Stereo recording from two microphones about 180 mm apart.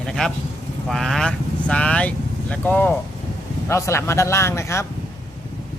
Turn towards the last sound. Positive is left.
turn(degrees=15)  # may be behind; listen again after turning